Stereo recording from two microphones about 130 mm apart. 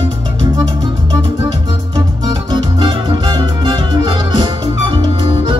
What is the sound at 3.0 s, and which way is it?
Music, 40° right (ahead or behind).